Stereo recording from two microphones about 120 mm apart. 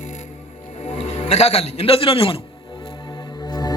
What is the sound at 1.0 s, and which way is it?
A man's voice, 65° left (ahead or behind).